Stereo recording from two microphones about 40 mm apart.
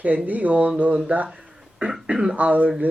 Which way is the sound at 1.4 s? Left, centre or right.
Right.